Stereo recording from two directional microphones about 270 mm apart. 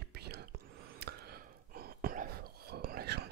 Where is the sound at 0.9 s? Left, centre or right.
Right.